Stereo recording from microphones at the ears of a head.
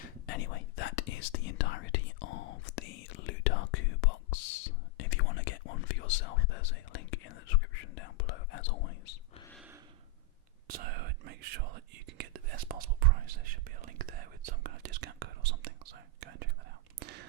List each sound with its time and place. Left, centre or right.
0.3 s whispering: left
10.7 s whispering: right